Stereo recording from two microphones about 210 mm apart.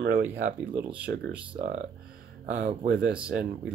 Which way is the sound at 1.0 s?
55° right (ahead or behind).